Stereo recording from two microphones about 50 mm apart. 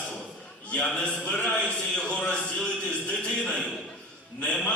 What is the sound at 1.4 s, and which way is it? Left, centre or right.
Speech, left.